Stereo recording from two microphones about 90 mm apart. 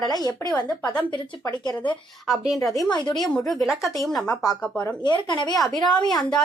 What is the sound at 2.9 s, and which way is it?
Speech, 55° left (ahead or behind).